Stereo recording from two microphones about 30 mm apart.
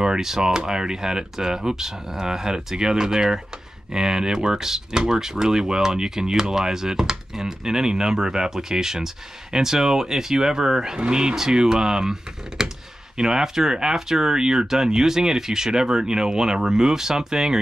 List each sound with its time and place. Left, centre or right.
0.0 s speech: centre